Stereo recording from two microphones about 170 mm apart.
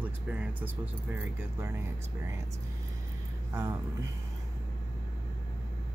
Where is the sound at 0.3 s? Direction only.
10° right (ahead or behind).